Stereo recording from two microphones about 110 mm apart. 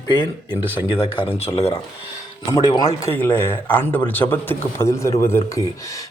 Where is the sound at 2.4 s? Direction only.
35° left (ahead or behind).